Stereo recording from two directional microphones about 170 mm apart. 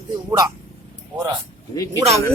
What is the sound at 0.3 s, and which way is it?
Speech, 20° right (ahead or behind).